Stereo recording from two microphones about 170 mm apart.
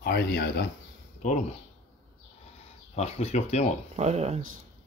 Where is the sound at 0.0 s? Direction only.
70° left (ahead or behind).